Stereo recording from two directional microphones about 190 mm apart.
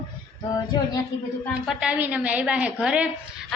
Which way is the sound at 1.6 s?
5° right (ahead or behind).